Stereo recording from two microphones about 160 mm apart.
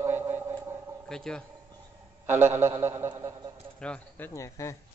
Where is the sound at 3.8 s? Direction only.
5° left (ahead or behind).